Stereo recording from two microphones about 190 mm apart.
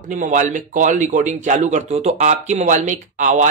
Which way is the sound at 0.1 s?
40° right (ahead or behind).